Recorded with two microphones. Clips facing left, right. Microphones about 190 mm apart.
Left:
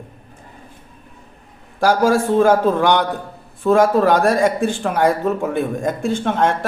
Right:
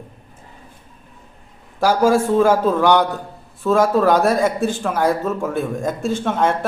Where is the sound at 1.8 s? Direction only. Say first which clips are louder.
Even; 5° right (ahead or behind).